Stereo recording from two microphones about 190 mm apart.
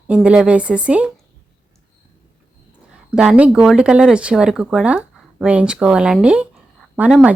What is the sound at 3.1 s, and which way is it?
Speech, 5° right (ahead or behind).